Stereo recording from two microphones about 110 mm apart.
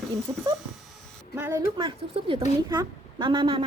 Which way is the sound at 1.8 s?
50° right (ahead or behind).